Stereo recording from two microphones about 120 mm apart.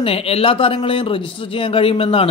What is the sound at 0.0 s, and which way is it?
Speech, 50° left (ahead or behind).